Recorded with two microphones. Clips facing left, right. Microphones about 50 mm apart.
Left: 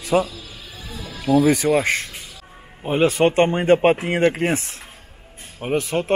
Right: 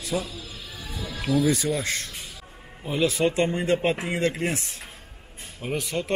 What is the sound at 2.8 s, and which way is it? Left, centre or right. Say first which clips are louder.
Speech: left 6 dB; left.